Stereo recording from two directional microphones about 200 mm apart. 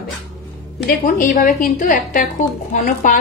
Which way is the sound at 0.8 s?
45° left (ahead or behind).